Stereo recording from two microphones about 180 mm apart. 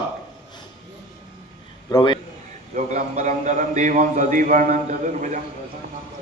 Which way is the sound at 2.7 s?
40° right (ahead or behind).